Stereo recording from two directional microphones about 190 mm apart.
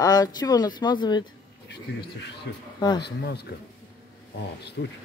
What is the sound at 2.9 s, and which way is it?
Speech, 60° left (ahead or behind).